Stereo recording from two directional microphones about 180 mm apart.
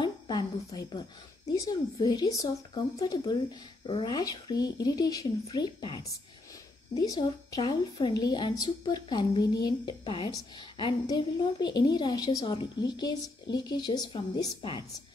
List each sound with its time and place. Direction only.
0.0 s a sound: 20° left (ahead or behind)
1.5 s a woman's voice: 20° left (ahead or behind)
7.0 s a woman's voice: 20° left (ahead or behind)